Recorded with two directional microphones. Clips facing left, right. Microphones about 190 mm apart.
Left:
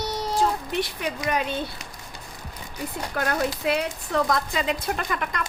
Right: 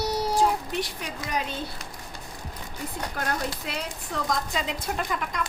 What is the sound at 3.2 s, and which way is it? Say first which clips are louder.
Speech: left 6 dB; 65° left (ahead or behind).